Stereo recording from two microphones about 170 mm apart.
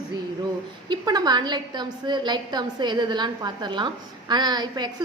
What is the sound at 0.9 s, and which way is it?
A woman's voice, 25° right (ahead or behind).